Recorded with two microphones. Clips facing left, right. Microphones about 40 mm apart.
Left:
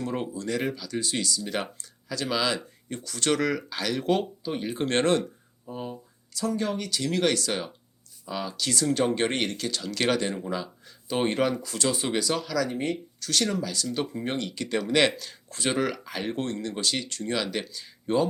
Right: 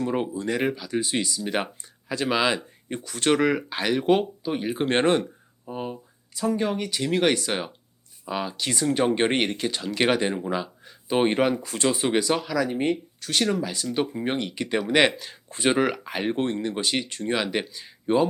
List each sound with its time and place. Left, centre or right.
0.0 s speech: centre
5.6 s speech: right